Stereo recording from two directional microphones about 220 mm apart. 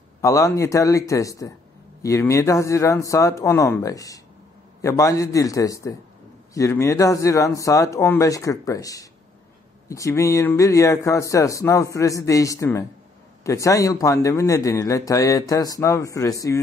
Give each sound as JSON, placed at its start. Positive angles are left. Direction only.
{"t": 0.2, "sound": "a man's voice", "side_deg": 15}